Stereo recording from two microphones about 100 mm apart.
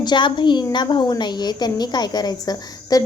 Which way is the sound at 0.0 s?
50° left (ahead or behind).